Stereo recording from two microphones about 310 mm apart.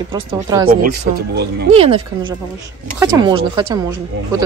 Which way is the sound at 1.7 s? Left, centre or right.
Centre.